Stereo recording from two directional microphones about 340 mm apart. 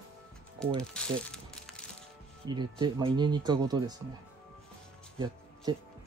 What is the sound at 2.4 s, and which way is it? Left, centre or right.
Speech, centre.